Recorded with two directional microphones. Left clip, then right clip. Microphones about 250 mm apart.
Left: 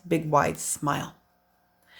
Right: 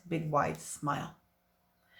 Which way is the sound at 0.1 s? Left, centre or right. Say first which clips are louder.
Left 8 dB; left.